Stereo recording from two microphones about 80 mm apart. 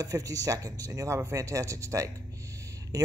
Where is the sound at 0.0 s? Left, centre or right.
Right.